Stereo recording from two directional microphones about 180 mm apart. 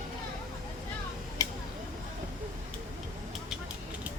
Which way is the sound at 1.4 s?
20° left (ahead or behind).